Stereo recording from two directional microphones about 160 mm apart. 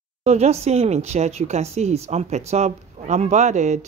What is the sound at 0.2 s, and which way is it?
Speech, 45° right (ahead or behind).